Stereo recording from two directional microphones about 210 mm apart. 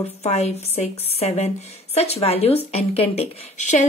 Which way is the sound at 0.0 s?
30° left (ahead or behind).